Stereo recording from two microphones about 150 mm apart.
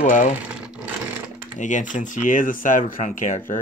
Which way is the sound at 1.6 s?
55° left (ahead or behind).